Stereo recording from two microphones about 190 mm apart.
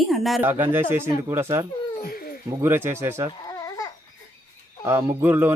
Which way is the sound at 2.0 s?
55° left (ahead or behind).